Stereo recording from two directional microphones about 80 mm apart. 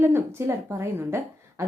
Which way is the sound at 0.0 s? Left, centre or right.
Right.